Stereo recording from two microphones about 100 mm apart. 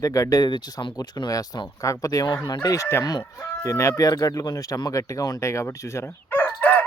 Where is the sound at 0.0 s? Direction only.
35° left (ahead or behind).